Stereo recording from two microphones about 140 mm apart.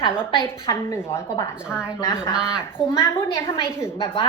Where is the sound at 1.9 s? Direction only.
20° left (ahead or behind).